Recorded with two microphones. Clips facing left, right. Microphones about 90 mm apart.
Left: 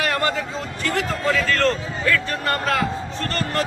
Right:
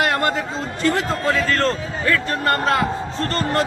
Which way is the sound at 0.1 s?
25° right (ahead or behind).